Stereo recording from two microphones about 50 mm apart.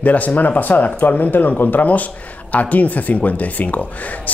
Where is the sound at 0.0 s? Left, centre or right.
Left.